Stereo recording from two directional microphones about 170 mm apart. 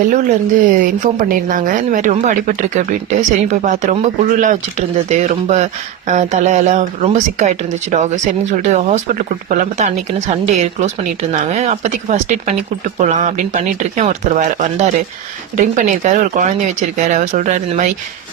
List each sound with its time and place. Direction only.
0.6 s speech: 50° right (ahead or behind)